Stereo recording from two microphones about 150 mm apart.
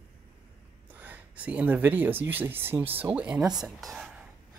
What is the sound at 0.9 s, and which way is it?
Speech, 10° right (ahead or behind).